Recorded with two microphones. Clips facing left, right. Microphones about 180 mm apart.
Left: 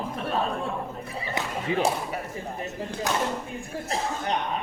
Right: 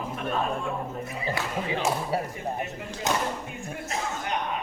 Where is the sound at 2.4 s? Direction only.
35° left (ahead or behind).